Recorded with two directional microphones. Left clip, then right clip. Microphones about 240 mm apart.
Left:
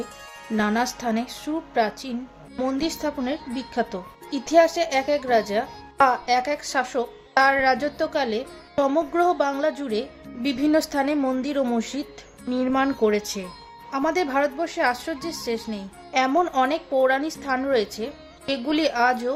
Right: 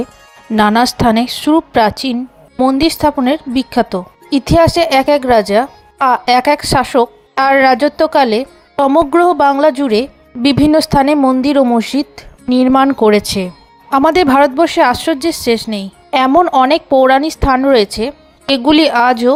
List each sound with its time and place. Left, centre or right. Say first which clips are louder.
0.5 s speech: right 13 dB; right